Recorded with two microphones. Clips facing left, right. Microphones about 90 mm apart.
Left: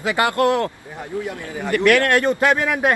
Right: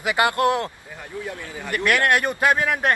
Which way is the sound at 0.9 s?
20° left (ahead or behind).